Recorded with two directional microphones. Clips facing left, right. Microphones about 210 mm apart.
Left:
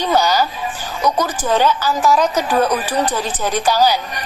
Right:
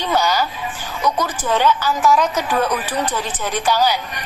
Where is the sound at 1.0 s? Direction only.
40° left (ahead or behind).